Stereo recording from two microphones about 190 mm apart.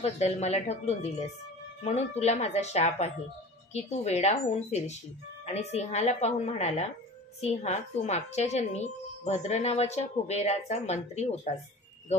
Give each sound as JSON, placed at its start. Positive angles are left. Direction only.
{"t": 0.0, "sound": "speech", "side_deg": 35}